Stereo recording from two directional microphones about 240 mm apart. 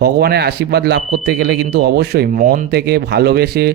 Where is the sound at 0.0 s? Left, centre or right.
Right.